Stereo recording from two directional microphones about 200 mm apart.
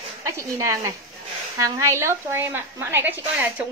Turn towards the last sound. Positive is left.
turn(degrees=-10)  # may be behind; listen again after turning